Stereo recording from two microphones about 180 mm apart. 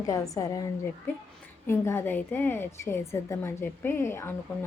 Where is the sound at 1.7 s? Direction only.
15° left (ahead or behind).